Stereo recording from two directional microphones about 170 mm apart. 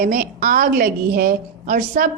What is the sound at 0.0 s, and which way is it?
A woman's voice, 55° right (ahead or behind).